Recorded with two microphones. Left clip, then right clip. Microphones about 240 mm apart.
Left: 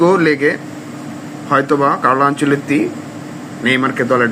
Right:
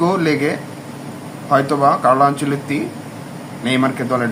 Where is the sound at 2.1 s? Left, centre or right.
Centre.